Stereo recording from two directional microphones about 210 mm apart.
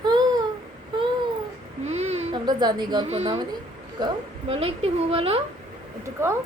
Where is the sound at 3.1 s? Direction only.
30° right (ahead or behind).